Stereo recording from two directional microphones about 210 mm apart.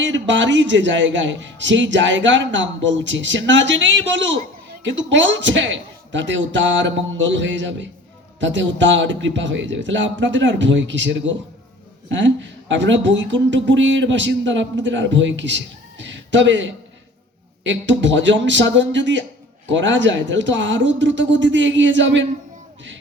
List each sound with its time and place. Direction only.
0.0 s speech: 60° right (ahead or behind)